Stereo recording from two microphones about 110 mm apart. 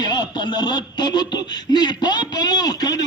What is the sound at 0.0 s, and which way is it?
A man's voice, 40° left (ahead or behind).